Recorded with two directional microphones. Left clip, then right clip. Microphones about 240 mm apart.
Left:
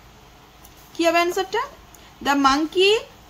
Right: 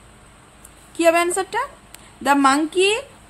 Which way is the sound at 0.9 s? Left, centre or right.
Right.